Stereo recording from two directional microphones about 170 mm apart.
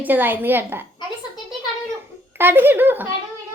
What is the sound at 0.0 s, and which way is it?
Speech, 10° right (ahead or behind).